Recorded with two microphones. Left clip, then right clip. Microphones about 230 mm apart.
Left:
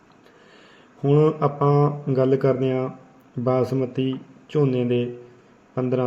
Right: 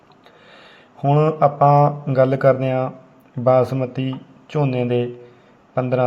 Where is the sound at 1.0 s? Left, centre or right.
Centre.